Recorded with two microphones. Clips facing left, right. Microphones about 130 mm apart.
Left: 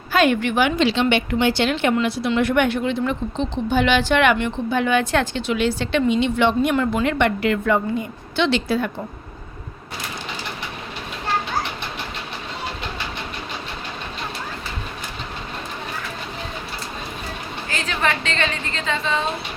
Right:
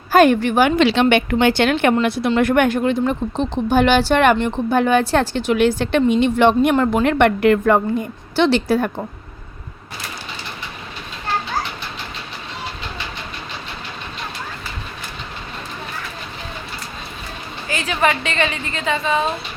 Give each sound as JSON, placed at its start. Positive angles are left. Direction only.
{"t": 0.1, "sound": "a woman's voice", "side_deg": -40}
{"t": 0.8, "sound": "a woman's voice", "side_deg": -65}
{"t": 17.7, "sound": "a woman's voice", "side_deg": -10}